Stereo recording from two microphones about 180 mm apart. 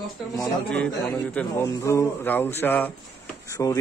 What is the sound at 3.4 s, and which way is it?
Speech, 15° left (ahead or behind).